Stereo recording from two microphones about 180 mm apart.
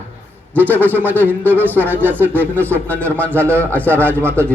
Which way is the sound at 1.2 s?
10° left (ahead or behind).